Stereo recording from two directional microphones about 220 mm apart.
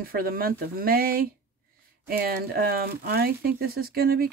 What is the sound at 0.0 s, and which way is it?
Speech, 40° right (ahead or behind).